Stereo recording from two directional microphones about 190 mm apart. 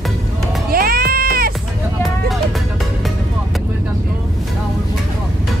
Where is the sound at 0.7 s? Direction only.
50° right (ahead or behind).